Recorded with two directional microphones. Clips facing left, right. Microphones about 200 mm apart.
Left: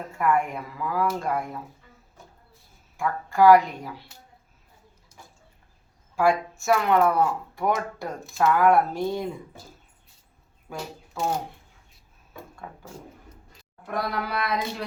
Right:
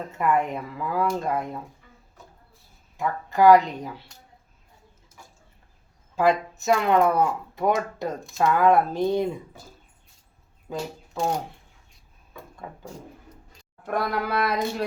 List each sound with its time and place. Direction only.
0.1 s speech: 20° right (ahead or behind)
3.0 s speech: 20° right (ahead or behind)
6.1 s speech: 20° right (ahead or behind)
10.7 s speech: 20° right (ahead or behind)
14.0 s speech: 50° right (ahead or behind)